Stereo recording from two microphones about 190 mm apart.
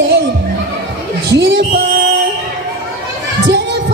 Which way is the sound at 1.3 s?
65° right (ahead or behind).